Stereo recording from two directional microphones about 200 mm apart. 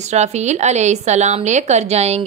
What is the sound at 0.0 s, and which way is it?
A woman's voice, 35° right (ahead or behind).